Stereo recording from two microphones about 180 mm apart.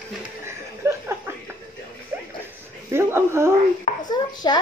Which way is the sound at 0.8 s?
15° right (ahead or behind).